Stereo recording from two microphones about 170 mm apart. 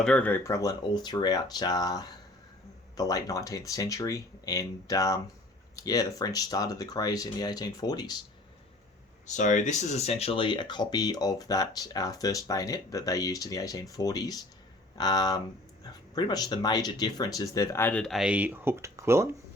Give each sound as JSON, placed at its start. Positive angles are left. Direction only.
{"t": 0.0, "sound": "speech", "side_deg": 5}
{"t": 9.2, "sound": "speech", "side_deg": 45}